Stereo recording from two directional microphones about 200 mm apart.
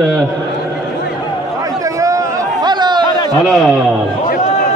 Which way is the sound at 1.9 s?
15° right (ahead or behind).